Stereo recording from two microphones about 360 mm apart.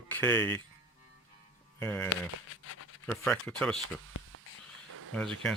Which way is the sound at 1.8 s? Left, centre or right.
Centre.